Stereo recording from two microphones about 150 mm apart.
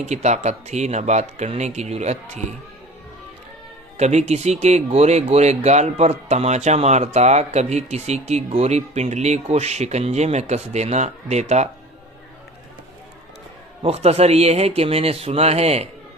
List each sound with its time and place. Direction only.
0.0 s speech: 50° right (ahead or behind)
3.9 s speech: 50° right (ahead or behind)
13.8 s speech: 45° right (ahead or behind)